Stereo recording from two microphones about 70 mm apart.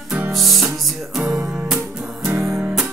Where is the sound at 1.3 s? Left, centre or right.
Centre.